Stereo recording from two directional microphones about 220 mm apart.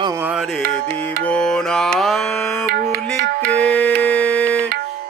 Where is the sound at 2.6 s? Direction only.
50° right (ahead or behind).